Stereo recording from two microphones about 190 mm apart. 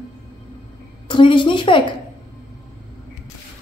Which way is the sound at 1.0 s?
25° left (ahead or behind).